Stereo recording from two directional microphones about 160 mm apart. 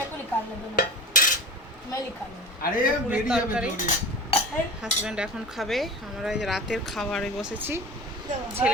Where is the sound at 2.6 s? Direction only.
60° left (ahead or behind).